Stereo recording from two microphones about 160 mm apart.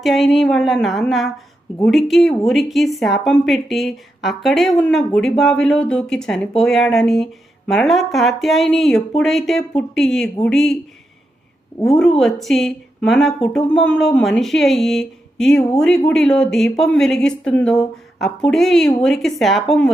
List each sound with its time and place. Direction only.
0.0 s speech: centre (ahead or behind)
11.9 s speech: 5° left (ahead or behind)